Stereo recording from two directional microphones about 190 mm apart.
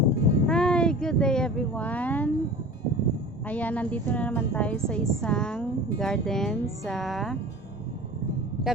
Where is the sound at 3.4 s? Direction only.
10° left (ahead or behind).